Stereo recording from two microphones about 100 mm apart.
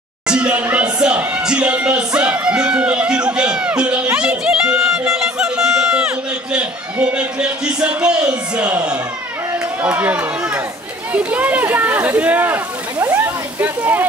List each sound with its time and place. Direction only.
0.3 s speech: 10° right (ahead or behind)